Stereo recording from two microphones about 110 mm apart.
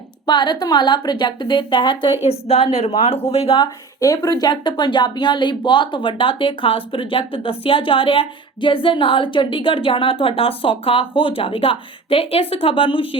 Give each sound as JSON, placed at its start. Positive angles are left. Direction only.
{"t": 0.3, "sound": "speech", "side_deg": 40}
{"t": 2.5, "sound": "speech", "side_deg": 60}
{"t": 3.5, "sound": "speech", "side_deg": 35}